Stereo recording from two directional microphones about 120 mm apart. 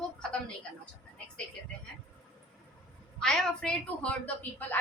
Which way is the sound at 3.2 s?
5° left (ahead or behind).